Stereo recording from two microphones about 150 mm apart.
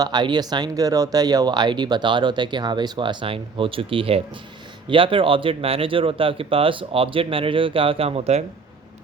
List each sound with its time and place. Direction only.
0.0 s speech: 30° right (ahead or behind); by 8.4 s 45° right (ahead or behind)